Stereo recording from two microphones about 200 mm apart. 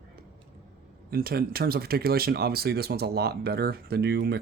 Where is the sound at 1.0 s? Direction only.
50° right (ahead or behind).